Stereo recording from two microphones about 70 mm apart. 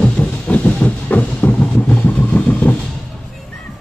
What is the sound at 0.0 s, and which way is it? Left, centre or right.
Music, centre.